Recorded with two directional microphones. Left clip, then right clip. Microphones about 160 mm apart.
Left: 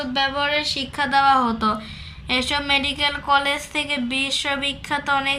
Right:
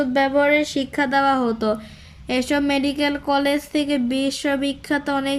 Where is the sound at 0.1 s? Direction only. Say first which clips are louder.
Right 2 dB; 45° right (ahead or behind).